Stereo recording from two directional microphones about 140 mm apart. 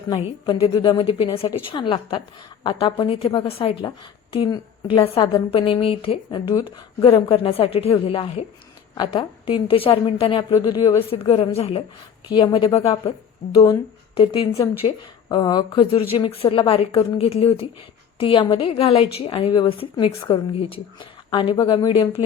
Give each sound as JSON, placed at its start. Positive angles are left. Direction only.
{"t": 0.4, "sound": "a woman's voice", "side_deg": 30}
{"t": 3.8, "sound": "a woman's voice", "side_deg": 35}
{"t": 5.2, "sound": "a woman's voice", "side_deg": 35}
{"t": 6.5, "sound": "a woman's voice", "side_deg": 30}
{"t": 11.5, "sound": "a woman's voice", "side_deg": 45}
{"t": 12.3, "sound": "a woman's voice", "side_deg": 30}
{"t": 19.5, "sound": "a woman's voice", "side_deg": 30}